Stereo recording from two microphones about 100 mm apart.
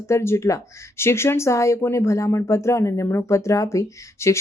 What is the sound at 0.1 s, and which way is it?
A woman's voice, 25° left (ahead or behind).